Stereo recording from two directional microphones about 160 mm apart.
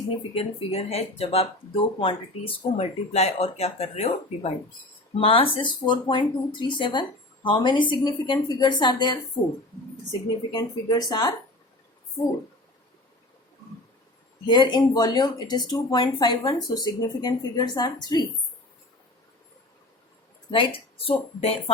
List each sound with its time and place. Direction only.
0.3 s speech: 40° left (ahead or behind)
14.4 s speech: 30° left (ahead or behind)
20.5 s speech: 35° left (ahead or behind)